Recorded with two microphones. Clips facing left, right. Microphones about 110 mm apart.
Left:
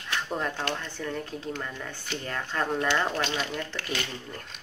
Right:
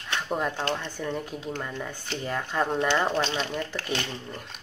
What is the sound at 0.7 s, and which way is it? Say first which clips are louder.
Speech: right 2 dB; 15° right (ahead or behind).